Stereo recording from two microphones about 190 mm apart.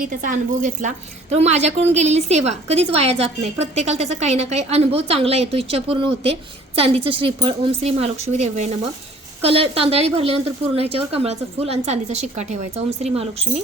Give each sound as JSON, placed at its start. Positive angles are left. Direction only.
{"t": 0.1, "sound": "a woman's voice", "side_deg": -45}